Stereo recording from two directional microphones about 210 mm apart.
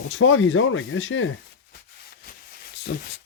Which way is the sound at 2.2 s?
50° left (ahead or behind).